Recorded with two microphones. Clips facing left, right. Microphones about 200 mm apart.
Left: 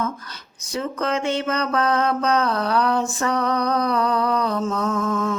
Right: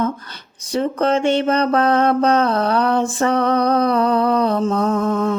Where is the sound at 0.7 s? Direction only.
30° right (ahead or behind).